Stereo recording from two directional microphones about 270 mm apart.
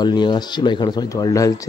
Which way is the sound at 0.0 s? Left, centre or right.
Centre.